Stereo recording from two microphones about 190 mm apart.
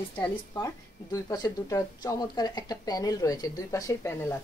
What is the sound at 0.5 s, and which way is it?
Speech, 20° left (ahead or behind).